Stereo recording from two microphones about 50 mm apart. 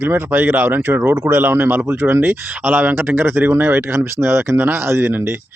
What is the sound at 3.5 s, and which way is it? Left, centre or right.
Speech, right.